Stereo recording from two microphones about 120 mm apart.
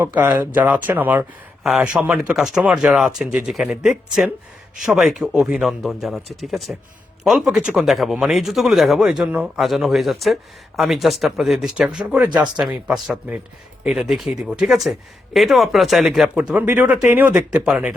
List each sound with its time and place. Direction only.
0.0 s speech: 15° right (ahead or behind)
1.6 s speech: centre (ahead or behind)
16.4 s speech: 15° right (ahead or behind)